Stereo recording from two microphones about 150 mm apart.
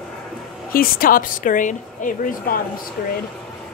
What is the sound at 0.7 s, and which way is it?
A woman's voice, 70° left (ahead or behind).